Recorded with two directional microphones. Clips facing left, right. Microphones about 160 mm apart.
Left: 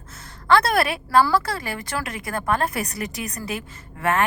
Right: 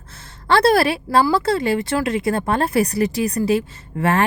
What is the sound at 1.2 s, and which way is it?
Speech, 25° right (ahead or behind).